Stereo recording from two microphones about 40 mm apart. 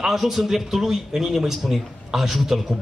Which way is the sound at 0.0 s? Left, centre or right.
Centre.